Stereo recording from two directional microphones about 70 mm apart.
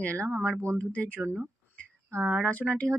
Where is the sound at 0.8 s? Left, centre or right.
Left.